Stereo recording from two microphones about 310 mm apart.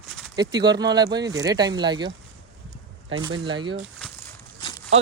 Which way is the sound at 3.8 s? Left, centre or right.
Centre.